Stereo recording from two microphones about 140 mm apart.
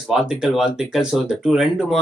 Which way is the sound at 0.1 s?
Centre (ahead or behind).